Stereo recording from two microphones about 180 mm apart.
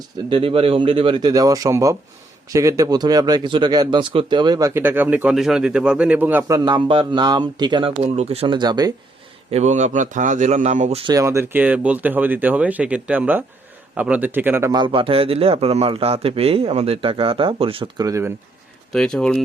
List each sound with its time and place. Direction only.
0.3 s a man's voice: 30° right (ahead or behind); by 6.6 s 10° right (ahead or behind)
6.7 s a man's voice: 30° right (ahead or behind)
8.0 s a man's voice: 35° right (ahead or behind)
9.5 s speech: 40° right (ahead or behind)
11.1 s speech: 15° right (ahead or behind)
18.9 s speech: 5° left (ahead or behind)